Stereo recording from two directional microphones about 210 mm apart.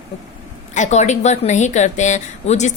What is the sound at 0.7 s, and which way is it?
A woman's voice, 35° left (ahead or behind).